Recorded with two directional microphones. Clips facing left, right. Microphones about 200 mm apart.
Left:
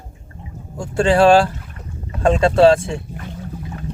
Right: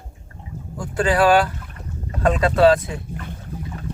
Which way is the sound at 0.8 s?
25° left (ahead or behind).